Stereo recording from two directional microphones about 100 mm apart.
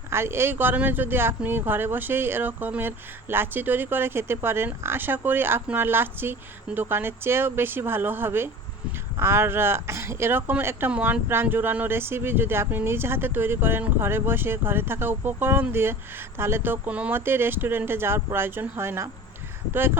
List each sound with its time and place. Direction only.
0.1 s speech: 25° right (ahead or behind)